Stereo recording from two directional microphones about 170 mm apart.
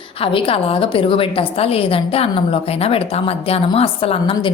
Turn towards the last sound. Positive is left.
turn(degrees=35)  # may be behind; listen again after turning